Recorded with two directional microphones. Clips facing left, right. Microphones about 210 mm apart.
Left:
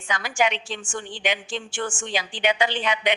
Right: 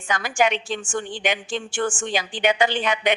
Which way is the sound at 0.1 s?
45° right (ahead or behind).